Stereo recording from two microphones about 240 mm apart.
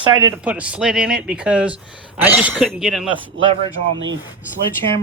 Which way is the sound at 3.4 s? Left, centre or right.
Right.